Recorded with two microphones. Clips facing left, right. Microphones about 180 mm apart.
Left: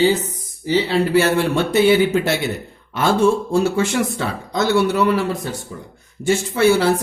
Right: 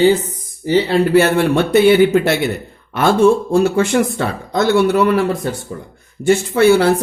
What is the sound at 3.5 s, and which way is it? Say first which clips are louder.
Speech: right 4 dB; 55° right (ahead or behind).